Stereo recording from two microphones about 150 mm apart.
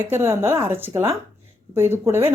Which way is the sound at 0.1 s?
15° right (ahead or behind).